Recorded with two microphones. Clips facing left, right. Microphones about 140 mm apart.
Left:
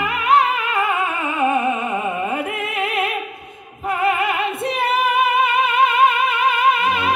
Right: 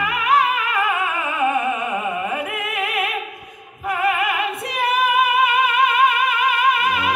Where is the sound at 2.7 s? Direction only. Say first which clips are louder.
Left 2 dB; 25° left (ahead or behind).